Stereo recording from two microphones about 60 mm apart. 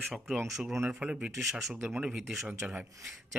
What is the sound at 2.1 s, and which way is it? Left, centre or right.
Speech, centre.